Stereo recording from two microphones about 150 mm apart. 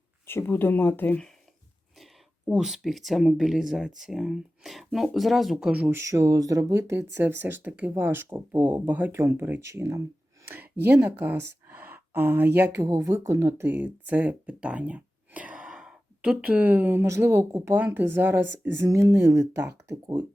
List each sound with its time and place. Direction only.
0.3 s speech: 15° left (ahead or behind)
2.5 s speech: 5° right (ahead or behind)
10.4 s a sound: 15° right (ahead or behind)
12.7 s speech: 20° right (ahead or behind)